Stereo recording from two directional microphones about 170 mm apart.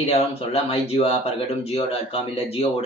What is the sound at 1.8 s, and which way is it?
Speech, 35° left (ahead or behind).